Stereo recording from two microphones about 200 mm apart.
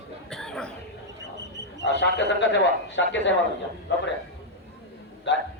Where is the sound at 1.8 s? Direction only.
60° left (ahead or behind).